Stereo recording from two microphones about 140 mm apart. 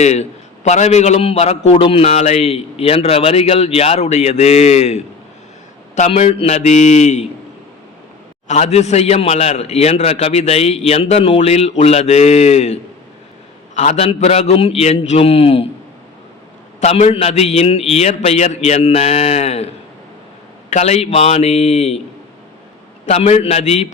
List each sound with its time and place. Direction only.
0.0 s a man's voice: 55° left (ahead or behind)
6.1 s a man's voice: 45° left (ahead or behind)
8.4 s a man's voice: 50° left (ahead or behind)
16.8 s a man's voice: 50° left (ahead or behind)
23.0 s a man's voice: 45° left (ahead or behind)